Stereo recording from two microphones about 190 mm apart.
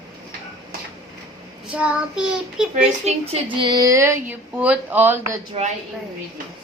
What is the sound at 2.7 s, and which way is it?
A woman's voice, 35° right (ahead or behind).